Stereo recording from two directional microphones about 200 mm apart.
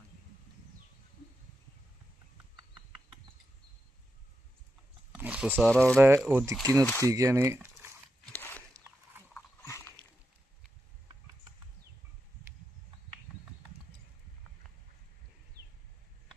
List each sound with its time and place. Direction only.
5.1 s speech: 5° right (ahead or behind)
6.4 s speech: 15° right (ahead or behind)
6.8 s speech: 10° left (ahead or behind)
7.1 s speech: 15° right (ahead or behind)
8.2 s a sound: 10° left (ahead or behind)
8.7 s wild animals: 10° right (ahead or behind)
9.3 s a sound: 15° left (ahead or behind)